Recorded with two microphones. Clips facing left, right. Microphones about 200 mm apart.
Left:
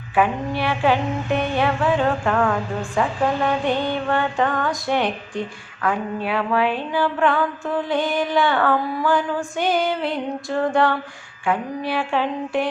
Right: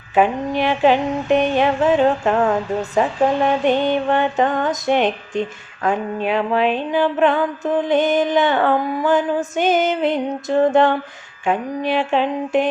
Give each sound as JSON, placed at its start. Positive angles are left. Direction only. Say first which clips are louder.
{"t": 0.1, "sound": "mantra", "louder": "right 3 dB", "side_deg": -20}